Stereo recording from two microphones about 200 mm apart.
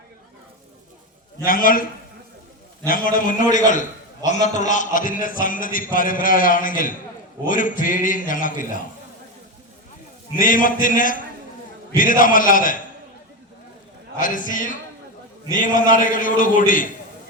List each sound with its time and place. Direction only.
1.5 s a man's voice: 45° left (ahead or behind)
2.8 s a man's voice: 45° left (ahead or behind)
10.3 s a man's voice: 40° left (ahead or behind)
14.2 s a man's voice: 40° left (ahead or behind)